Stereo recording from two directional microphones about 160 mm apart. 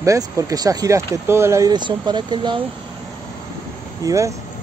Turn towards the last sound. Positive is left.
turn(degrees=-20)  # may be behind; listen again after turning